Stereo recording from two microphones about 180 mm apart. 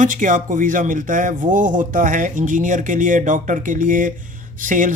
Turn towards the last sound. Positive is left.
turn(degrees=-45)  # may be behind; listen again after turning